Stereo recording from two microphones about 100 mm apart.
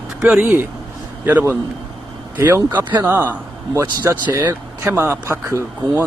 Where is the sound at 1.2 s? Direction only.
20° right (ahead or behind).